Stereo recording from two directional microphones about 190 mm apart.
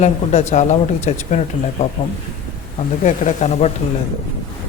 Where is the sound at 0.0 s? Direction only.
35° left (ahead or behind).